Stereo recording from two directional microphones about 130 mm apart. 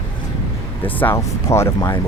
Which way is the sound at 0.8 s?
15° left (ahead or behind).